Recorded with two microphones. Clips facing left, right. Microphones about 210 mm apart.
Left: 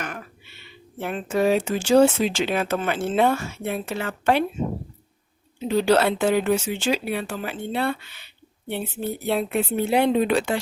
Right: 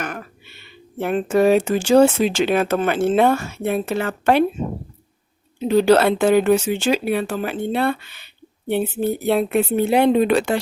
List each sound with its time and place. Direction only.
0.0 s a sound: 45° right (ahead or behind)
0.9 s speech: 60° right (ahead or behind)
5.5 s speech: 65° right (ahead or behind)